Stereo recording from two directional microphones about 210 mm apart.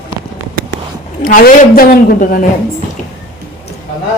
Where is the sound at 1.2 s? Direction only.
40° left (ahead or behind).